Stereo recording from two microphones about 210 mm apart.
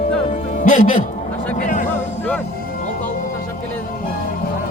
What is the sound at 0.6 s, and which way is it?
Speech, 35° left (ahead or behind).